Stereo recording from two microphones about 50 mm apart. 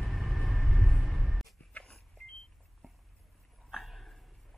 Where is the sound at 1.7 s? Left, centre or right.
Left.